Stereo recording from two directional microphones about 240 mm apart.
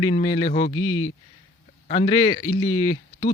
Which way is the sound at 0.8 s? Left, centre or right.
Left.